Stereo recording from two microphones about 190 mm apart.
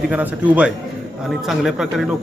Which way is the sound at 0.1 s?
5° right (ahead or behind).